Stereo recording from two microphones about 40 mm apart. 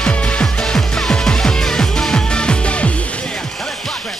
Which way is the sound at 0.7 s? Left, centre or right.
Centre.